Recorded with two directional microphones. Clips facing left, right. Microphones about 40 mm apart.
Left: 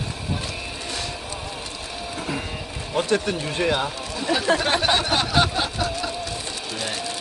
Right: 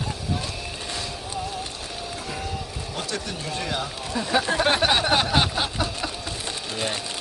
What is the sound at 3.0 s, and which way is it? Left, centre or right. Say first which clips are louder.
Speech: left 10 dB; left.